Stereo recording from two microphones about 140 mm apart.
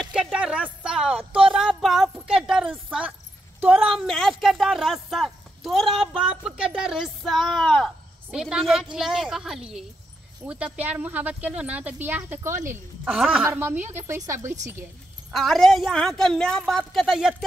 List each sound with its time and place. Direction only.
0.0 s a sound: 5° right (ahead or behind)
3.6 s speech: 5° right (ahead or behind)
13.0 s speech: 5° right (ahead or behind); by 14.5 s 20° right (ahead or behind)
15.3 s speech: centre (ahead or behind)